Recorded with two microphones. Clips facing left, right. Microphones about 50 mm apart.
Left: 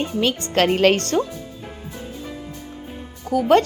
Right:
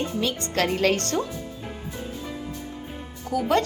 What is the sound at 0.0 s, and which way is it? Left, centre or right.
Speech, left.